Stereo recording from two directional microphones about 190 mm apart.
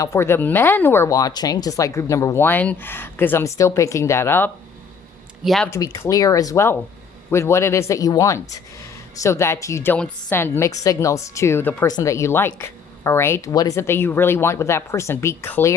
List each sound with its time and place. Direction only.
0.0 s a woman's voice: 15° left (ahead or behind)
5.4 s speech: centre (ahead or behind)
5.7 s a woman's voice: 15° left (ahead or behind)